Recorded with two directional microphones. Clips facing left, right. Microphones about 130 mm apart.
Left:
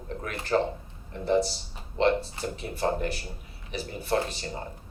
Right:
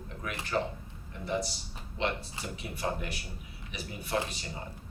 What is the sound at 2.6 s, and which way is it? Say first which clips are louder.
Speech: left 7 dB; 35° left (ahead or behind).